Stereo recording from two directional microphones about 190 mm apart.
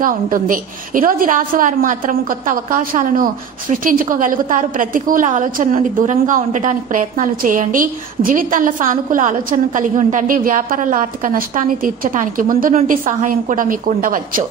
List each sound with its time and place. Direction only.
0.0 s a woman's voice: 45° right (ahead or behind)